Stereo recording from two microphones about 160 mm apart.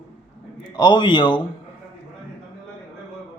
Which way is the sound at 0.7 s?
30° left (ahead or behind).